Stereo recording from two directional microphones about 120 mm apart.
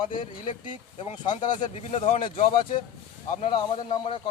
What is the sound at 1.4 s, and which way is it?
Speech, 90° left.